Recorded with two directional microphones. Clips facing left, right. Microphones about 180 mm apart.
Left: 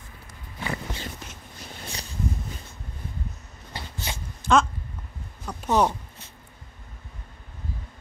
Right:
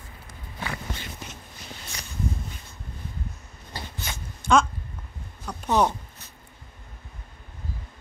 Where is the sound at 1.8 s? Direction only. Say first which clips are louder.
Left 4 dB; 30° left (ahead or behind).